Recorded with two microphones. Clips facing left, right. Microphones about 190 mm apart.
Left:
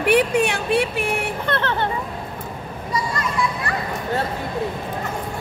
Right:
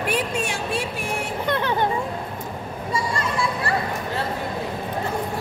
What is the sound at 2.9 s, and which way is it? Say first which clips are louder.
Children playing: left 1 dB; 30° right (ahead or behind).